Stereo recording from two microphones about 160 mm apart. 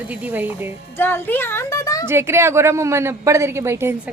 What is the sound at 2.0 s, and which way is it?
A woman's voice, 15° right (ahead or behind).